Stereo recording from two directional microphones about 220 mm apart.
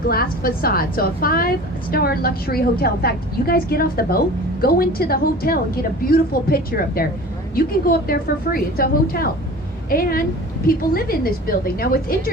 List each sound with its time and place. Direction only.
0.1 s a woman's voice: 45° left (ahead or behind)